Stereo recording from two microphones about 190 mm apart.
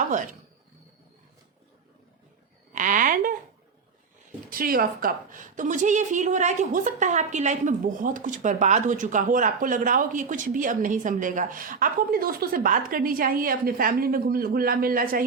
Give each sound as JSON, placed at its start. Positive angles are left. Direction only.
{"t": 2.7, "sound": "a woman's voice", "side_deg": -45}
{"t": 4.4, "sound": "a woman's voice", "side_deg": -50}